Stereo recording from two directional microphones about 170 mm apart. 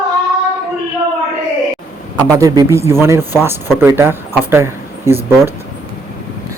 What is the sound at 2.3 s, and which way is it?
A man's voice, 20° right (ahead or behind).